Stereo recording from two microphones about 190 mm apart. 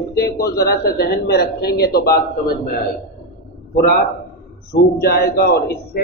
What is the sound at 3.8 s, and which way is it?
A man's voice, 50° left (ahead or behind).